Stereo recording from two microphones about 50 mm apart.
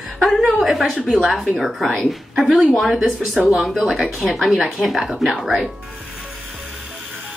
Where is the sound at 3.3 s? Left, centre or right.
Centre.